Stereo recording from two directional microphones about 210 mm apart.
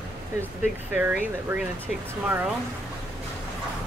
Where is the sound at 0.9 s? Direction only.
5° right (ahead or behind).